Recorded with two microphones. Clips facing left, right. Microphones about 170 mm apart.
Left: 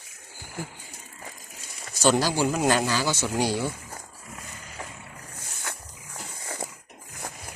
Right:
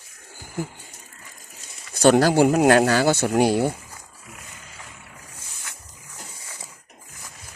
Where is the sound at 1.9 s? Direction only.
55° right (ahead or behind).